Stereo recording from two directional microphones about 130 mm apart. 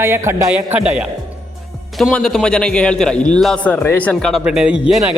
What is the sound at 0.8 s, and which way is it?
Speech, 10° right (ahead or behind).